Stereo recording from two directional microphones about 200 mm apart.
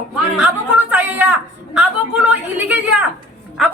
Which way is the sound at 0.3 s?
5° right (ahead or behind).